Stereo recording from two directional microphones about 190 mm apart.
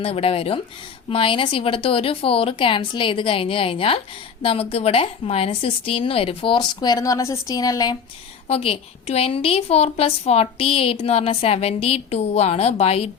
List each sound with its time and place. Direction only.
0.0 s a woman's voice: 30° left (ahead or behind)
8.4 s a woman's voice: 30° left (ahead or behind)